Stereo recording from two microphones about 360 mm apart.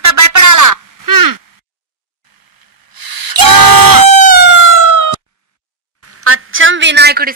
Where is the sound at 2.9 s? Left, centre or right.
Right.